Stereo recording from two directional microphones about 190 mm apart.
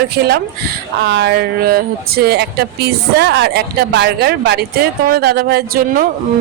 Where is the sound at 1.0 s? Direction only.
65° right (ahead or behind).